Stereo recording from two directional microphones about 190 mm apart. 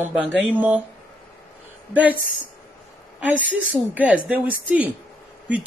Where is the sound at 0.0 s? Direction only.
10° right (ahead or behind).